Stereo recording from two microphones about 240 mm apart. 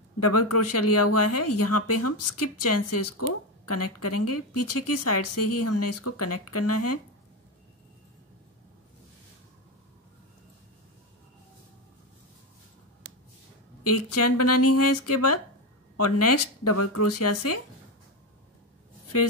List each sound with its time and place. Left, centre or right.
0.2 s speech: left
13.8 s speech: left